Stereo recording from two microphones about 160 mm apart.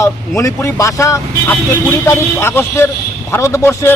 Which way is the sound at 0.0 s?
20° left (ahead or behind).